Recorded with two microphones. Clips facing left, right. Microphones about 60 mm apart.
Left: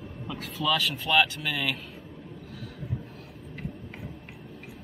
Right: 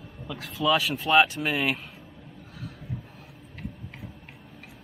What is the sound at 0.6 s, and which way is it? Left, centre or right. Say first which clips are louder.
Speech: right 3 dB; centre.